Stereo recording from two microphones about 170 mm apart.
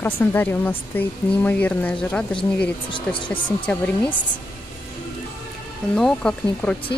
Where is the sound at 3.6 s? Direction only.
10° left (ahead or behind).